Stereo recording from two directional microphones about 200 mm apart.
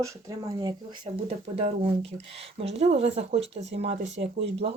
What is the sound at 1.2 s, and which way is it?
Speech, 35° right (ahead or behind).